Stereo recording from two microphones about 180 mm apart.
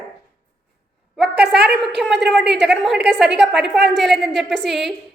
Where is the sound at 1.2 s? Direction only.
65° right (ahead or behind).